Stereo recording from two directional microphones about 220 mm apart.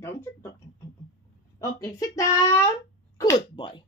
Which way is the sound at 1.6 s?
15° left (ahead or behind).